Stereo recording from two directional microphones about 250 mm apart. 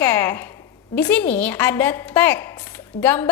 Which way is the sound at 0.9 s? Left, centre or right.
Centre.